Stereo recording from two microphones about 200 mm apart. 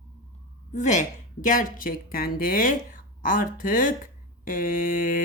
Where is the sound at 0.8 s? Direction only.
40° left (ahead or behind).